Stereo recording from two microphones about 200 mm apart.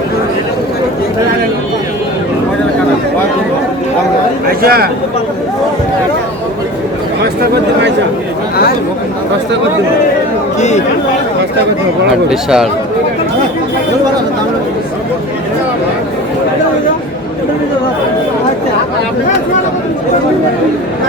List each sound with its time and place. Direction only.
4.6 s speech: 50° right (ahead or behind)
10.6 s chatter: 35° left (ahead or behind)
12.3 s speech: 5° right (ahead or behind)